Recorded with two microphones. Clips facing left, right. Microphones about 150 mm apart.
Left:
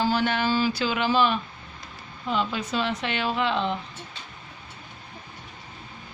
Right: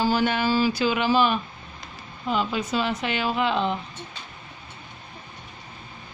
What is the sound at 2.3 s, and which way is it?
Speech, 10° right (ahead or behind).